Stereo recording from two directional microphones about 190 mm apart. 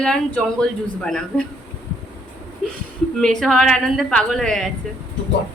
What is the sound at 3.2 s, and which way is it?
A woman's voice, 5° left (ahead or behind).